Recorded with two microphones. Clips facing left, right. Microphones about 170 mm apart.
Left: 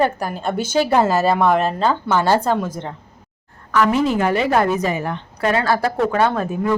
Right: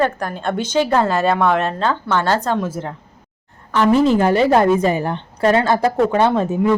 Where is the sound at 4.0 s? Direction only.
30° right (ahead or behind).